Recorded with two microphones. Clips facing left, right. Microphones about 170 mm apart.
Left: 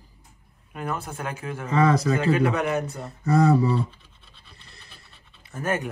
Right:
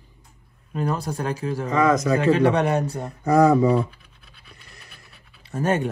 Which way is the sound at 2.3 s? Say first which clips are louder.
Right 4 dB; 35° right (ahead or behind).